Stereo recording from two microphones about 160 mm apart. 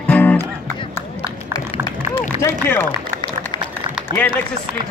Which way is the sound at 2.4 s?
15° left (ahead or behind).